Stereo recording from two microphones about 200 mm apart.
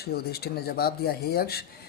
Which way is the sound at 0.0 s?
50° left (ahead or behind).